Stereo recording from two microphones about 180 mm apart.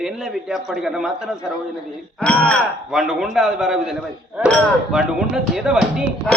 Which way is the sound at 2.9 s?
5° right (ahead or behind).